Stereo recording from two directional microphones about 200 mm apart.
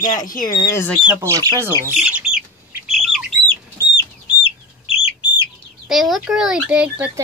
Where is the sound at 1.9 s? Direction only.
5° right (ahead or behind).